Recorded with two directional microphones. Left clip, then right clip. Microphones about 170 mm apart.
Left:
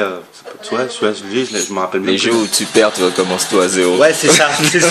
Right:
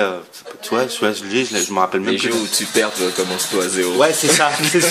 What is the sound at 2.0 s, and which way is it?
Speech, 20° left (ahead or behind).